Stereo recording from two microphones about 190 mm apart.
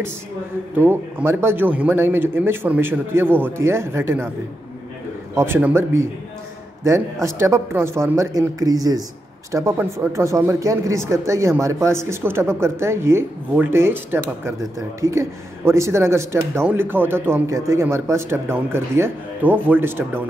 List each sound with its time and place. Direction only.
0.7 s a man's voice: 10° right (ahead or behind)
5.3 s a man's voice: 15° right (ahead or behind)